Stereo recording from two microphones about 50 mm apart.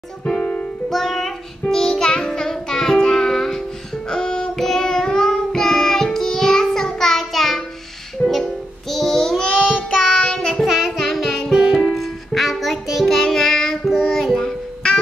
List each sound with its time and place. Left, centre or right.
0.3 s music: left
0.8 s child singing: centre
4.1 s music: centre
8.9 s child singing: centre
10.5 s music: centre
11.5 s music: centre
13.1 s child singing: centre